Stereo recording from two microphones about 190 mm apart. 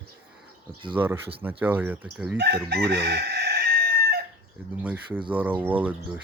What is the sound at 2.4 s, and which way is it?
Chicken, 60° right (ahead or behind).